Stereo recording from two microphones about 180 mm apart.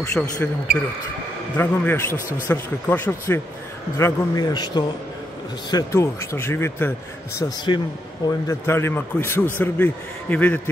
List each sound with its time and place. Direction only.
0.2 s speech: 5° left (ahead or behind)
1.6 s a man's voice: 10° left (ahead or behind)